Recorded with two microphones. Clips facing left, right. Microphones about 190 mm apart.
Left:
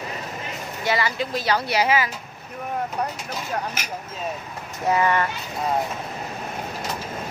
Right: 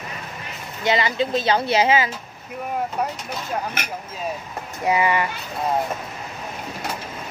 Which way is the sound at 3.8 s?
60° right (ahead or behind).